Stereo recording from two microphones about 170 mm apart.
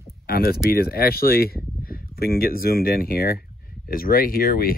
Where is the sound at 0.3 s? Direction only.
65° left (ahead or behind).